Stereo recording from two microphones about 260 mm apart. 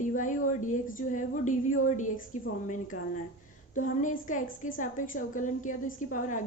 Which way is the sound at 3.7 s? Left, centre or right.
Left.